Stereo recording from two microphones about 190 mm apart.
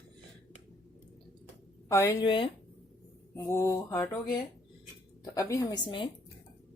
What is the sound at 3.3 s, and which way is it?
Mantra, 15° left (ahead or behind).